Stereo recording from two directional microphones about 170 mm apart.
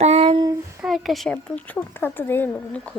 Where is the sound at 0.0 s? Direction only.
40° right (ahead or behind).